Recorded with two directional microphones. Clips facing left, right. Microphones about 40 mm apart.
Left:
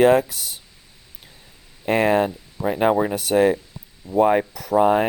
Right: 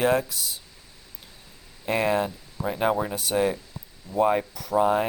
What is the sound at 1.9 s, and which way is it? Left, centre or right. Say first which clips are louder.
Speech: left 6 dB; left.